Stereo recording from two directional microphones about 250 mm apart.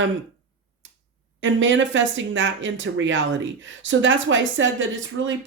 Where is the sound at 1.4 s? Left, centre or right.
Right.